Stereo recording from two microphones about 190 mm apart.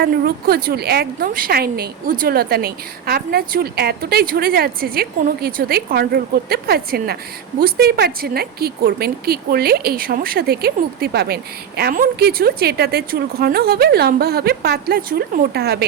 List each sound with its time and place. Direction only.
0.0 s a woman's voice: 55° right (ahead or behind)